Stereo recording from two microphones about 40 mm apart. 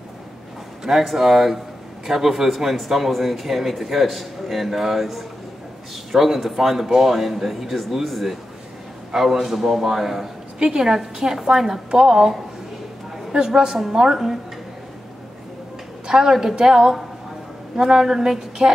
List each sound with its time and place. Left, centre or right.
1.1 s a man's voice: centre
10.6 s speech: centre
16.1 s speech: centre